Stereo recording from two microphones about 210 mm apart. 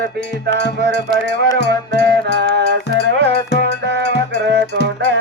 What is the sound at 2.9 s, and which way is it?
Music, 55° left (ahead or behind).